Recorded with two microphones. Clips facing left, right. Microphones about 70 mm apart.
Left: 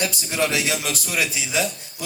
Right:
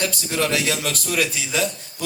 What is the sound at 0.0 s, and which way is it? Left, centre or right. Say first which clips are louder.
Speech: even; centre.